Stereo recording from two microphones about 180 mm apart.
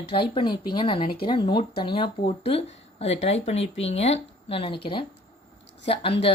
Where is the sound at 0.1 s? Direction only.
30° left (ahead or behind).